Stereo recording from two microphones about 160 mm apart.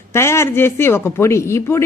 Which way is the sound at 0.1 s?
15° left (ahead or behind).